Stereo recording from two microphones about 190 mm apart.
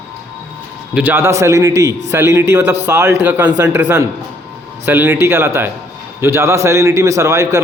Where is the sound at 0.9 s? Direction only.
10° right (ahead or behind).